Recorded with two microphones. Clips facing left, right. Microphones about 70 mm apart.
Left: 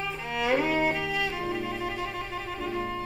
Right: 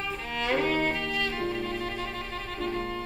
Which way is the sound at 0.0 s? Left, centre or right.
Centre.